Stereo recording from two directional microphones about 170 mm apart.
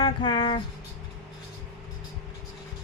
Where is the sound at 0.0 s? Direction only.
25° left (ahead or behind).